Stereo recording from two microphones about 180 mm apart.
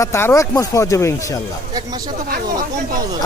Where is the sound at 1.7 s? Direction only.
20° right (ahead or behind).